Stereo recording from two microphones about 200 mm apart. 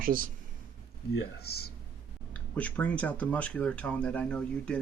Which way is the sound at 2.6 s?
5° left (ahead or behind).